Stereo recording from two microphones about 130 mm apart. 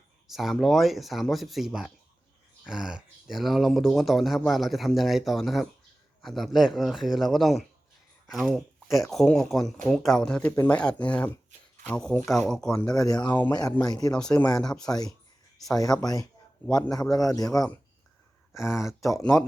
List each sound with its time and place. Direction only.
0.3 s speech: centre (ahead or behind)
13.1 s speech: 30° left (ahead or behind)
14.1 s speech: 5° left (ahead or behind)
14.8 s speech: 30° left (ahead or behind)
15.9 s speech: 5° left (ahead or behind)
17.0 s speech: 30° left (ahead or behind)
18.5 s speech: 5° right (ahead or behind)